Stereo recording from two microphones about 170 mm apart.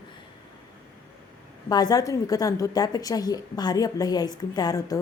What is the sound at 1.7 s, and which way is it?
A woman's voice, 25° left (ahead or behind).